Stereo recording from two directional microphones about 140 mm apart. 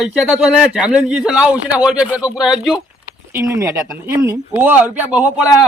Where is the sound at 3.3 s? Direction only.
20° right (ahead or behind).